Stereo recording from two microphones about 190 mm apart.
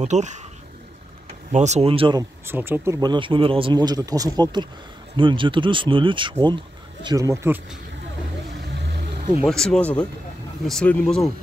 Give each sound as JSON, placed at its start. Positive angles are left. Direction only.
{"t": 0.0, "sound": "speech", "side_deg": -40}
{"t": 1.5, "sound": "speech", "side_deg": -35}
{"t": 2.4, "sound": "speech", "side_deg": -10}
{"t": 9.5, "sound": "speech", "side_deg": 0}